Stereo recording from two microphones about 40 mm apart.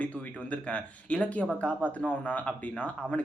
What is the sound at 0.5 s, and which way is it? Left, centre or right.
Speech, left.